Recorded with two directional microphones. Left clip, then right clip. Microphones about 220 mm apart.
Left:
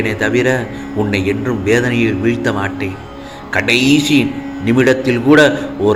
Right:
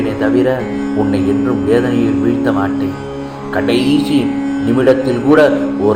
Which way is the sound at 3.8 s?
35° left (ahead or behind).